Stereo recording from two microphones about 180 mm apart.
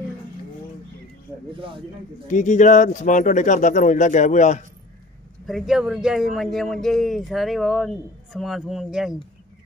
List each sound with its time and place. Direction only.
2.2 s speech: 45° left (ahead or behind)
5.5 s a man's voice: 5° right (ahead or behind)